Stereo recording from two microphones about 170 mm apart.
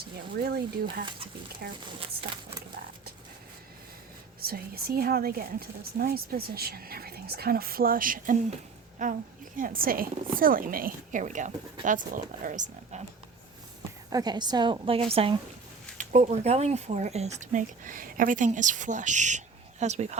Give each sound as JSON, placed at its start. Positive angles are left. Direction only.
{"t": 0.4, "sound": "a woman's voice", "side_deg": -65}
{"t": 2.0, "sound": "speech", "side_deg": -35}
{"t": 4.4, "sound": "a woman's voice", "side_deg": -60}
{"t": 14.1, "sound": "a woman's voice", "side_deg": -25}